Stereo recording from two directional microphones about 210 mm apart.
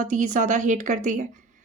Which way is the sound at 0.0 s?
35° right (ahead or behind).